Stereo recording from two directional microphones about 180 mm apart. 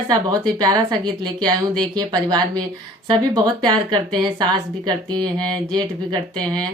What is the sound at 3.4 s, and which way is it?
Speech, 25° right (ahead or behind).